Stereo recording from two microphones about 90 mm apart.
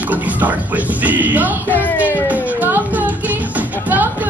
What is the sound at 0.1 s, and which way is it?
Speech, 20° right (ahead or behind).